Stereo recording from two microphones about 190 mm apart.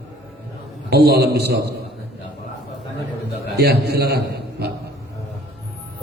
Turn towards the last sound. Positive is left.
turn(degrees=-60)  # may be behind; listen again after turning